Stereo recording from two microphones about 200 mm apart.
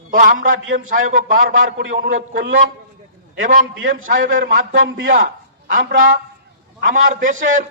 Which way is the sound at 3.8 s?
70° right (ahead or behind).